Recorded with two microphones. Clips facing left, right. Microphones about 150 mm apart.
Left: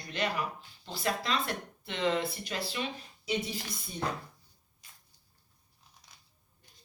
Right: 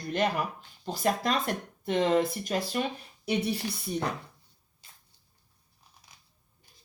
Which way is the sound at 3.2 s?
65° right (ahead or behind).